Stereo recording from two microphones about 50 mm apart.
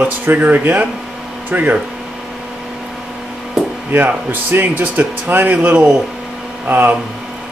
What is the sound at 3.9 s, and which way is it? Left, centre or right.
A man's voice, right.